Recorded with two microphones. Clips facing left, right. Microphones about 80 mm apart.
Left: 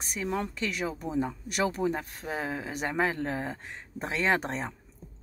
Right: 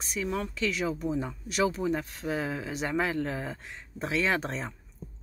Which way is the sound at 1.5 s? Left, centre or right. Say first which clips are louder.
Right 2 dB; left.